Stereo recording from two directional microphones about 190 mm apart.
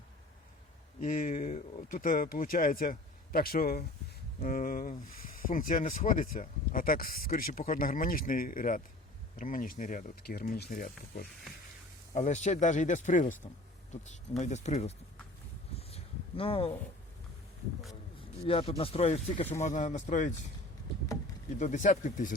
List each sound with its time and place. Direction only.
0.9 s speech: 45° left (ahead or behind)
15.7 s a sound: 30° left (ahead or behind)
18.3 s speech: 30° left (ahead or behind)
21.6 s speech: 40° left (ahead or behind)